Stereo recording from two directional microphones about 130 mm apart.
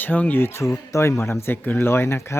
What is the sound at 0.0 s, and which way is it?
Speech, 15° left (ahead or behind).